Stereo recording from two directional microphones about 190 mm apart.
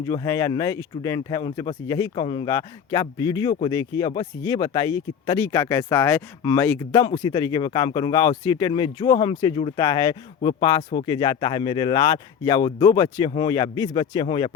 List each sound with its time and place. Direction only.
0.0 s speech: 20° left (ahead or behind)